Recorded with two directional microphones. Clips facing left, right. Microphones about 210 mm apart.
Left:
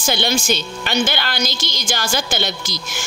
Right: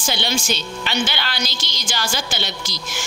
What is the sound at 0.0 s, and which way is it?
A woman's voice, 50° left (ahead or behind).